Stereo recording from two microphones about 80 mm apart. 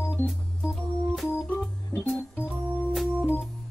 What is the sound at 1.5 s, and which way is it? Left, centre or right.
Organ, centre.